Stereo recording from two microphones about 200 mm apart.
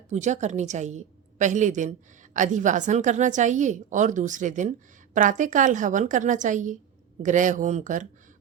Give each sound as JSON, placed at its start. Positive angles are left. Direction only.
{"t": 0.1, "sound": "a woman's voice", "side_deg": -35}